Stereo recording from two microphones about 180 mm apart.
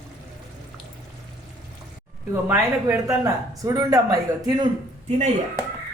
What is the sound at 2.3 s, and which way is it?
Speech, 10° right (ahead or behind).